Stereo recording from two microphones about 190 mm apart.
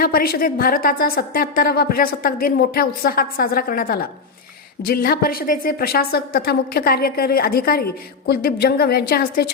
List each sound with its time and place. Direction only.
0.0 s a woman's voice: 50° left (ahead or behind)